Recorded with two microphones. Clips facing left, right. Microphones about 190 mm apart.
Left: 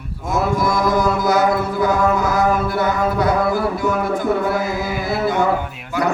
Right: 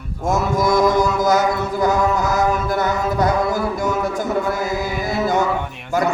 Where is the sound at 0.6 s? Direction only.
45° right (ahead or behind).